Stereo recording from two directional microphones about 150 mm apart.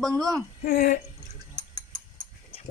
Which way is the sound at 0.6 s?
70° left (ahead or behind).